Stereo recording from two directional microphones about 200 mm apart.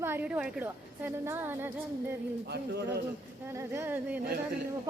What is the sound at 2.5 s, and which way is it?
Speech, 55° right (ahead or behind).